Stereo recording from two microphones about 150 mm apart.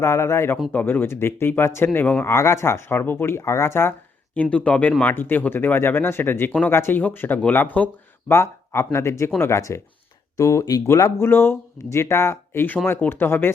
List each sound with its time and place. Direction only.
0.0 s speech: 15° left (ahead or behind)